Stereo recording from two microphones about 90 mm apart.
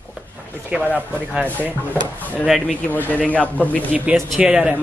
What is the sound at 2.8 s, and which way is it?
A man's voice, 20° left (ahead or behind).